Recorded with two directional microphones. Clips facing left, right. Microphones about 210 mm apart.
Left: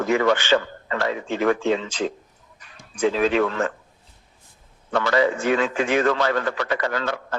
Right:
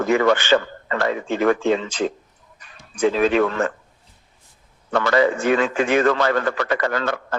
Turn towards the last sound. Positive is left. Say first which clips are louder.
# right 3 dB
turn(degrees=-50)  # may be behind; listen again after turning